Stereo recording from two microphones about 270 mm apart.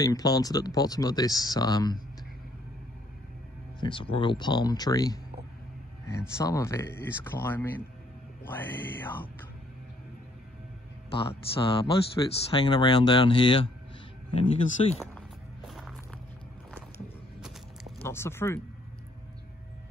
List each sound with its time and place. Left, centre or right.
0.0 s speech: centre
3.8 s speech: centre
11.1 s speech: centre
15.0 s walk: centre
18.0 s speech: centre